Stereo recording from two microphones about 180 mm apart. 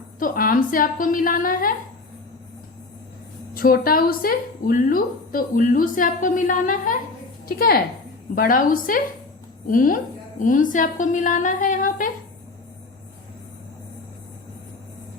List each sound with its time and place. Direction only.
0.2 s a woman's voice: 50° left (ahead or behind)
3.5 s a woman's voice: 55° left (ahead or behind)